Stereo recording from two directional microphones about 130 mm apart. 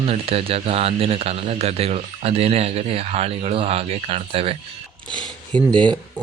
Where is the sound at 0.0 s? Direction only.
50° right (ahead or behind).